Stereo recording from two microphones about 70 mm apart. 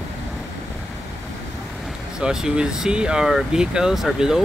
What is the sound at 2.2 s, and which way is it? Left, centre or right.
Speech, centre.